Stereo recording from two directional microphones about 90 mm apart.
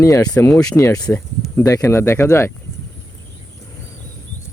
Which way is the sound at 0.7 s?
35° left (ahead or behind).